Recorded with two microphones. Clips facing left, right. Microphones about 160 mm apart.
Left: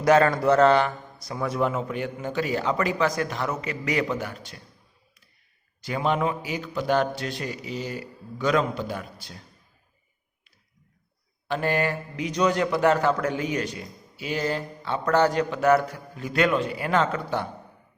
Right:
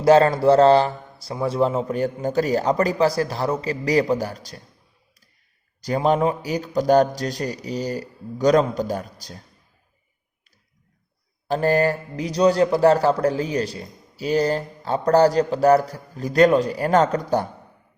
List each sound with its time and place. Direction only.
0.0 s speech: 30° right (ahead or behind)
5.8 s speech: 40° right (ahead or behind)
11.4 s speech: 40° right (ahead or behind)